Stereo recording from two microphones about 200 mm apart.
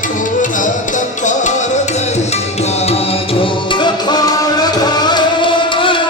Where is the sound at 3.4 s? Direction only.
25° left (ahead or behind).